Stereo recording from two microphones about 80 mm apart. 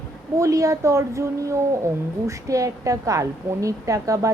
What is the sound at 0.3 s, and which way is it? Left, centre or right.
A woman's voice, right.